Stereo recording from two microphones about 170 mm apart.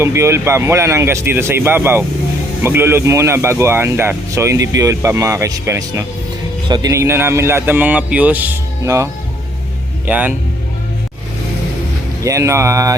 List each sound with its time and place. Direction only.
0.0 s speech: 15° right (ahead or behind)
10.1 s speech: 10° right (ahead or behind)
12.2 s speech: 15° right (ahead or behind)